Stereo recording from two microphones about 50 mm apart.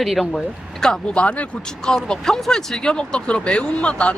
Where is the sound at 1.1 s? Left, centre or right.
Left.